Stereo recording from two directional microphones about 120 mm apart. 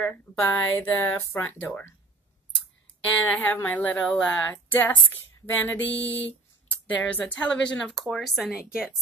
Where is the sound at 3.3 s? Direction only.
15° left (ahead or behind).